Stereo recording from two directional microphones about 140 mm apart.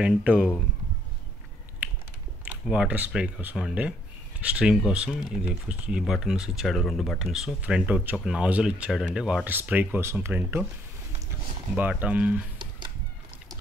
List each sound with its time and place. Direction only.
0.0 s speech: 10° right (ahead or behind)
2.7 s speech: 10° right (ahead or behind)
11.7 s speech: 10° right (ahead or behind)